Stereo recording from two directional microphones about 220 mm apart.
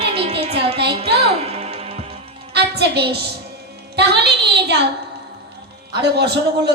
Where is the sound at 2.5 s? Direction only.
50° right (ahead or behind).